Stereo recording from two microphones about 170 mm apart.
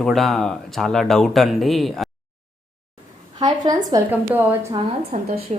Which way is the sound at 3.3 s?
20° right (ahead or behind).